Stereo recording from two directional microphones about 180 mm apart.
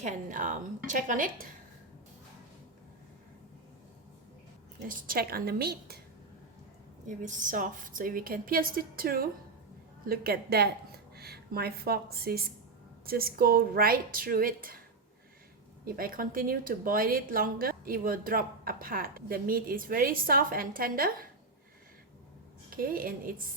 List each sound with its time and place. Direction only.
0.0 s speech: 45° right (ahead or behind)
4.9 s a woman's voice: 55° right (ahead or behind)
7.1 s a woman's voice: 45° right (ahead or behind)
15.8 s speech: 55° right (ahead or behind)
22.7 s speech: 50° right (ahead or behind)